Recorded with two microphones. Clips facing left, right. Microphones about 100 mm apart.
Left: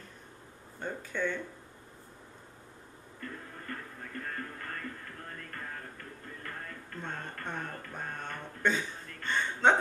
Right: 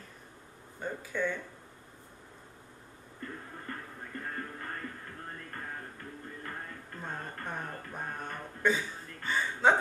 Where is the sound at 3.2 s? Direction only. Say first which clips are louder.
Even; 20° right (ahead or behind).